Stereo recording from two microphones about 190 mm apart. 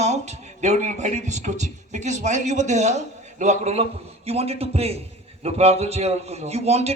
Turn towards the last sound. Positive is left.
turn(degrees=-35)  # may be behind; listen again after turning